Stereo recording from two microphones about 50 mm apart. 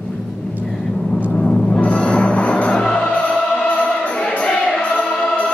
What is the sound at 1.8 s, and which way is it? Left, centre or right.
Music, left.